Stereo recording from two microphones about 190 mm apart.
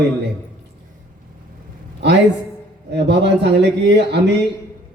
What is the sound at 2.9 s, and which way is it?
A man's voice, 65° right (ahead or behind).